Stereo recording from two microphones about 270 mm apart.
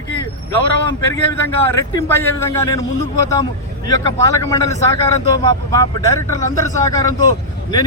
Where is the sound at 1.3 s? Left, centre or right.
Centre.